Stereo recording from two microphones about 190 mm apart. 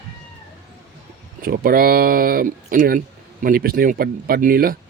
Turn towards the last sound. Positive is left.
turn(degrees=-50)  # may be behind; listen again after turning